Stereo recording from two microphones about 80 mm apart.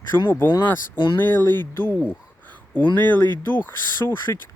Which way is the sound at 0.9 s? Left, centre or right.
Left.